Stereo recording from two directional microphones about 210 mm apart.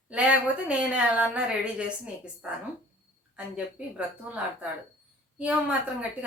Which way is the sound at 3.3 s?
5° right (ahead or behind).